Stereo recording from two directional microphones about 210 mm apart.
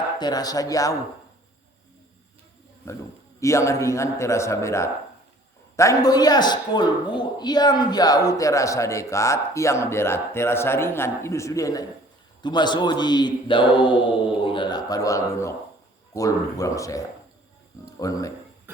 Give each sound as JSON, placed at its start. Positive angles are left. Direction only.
{"t": 0.2, "sound": "a man's voice", "side_deg": 20}
{"t": 2.8, "sound": "a man's voice", "side_deg": 15}
{"t": 18.0, "sound": "a man's voice", "side_deg": 15}